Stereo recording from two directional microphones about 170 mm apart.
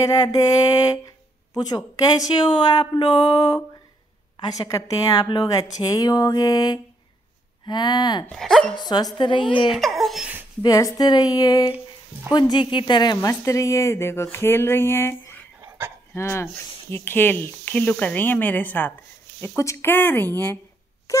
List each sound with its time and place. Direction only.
0.0 s speech: 20° left (ahead or behind)
8.3 s speech: centre (ahead or behind)
8.7 s speech: 25° left (ahead or behind)
9.7 s laughter: centre (ahead or behind)
10.6 s a woman's voice: 20° left (ahead or behind)
21.1 s a sound: 20° left (ahead or behind)